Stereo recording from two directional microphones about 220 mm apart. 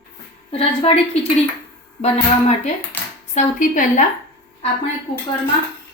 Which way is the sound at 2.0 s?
30° left (ahead or behind).